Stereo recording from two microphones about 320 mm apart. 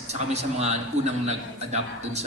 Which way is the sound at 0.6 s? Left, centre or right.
Centre.